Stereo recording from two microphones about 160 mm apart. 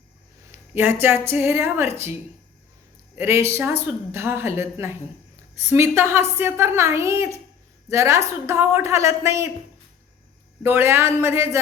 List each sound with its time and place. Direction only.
0.5 s speech: 15° right (ahead or behind)
3.2 s speech: 15° right (ahead or behind)
10.6 s speech: 15° right (ahead or behind)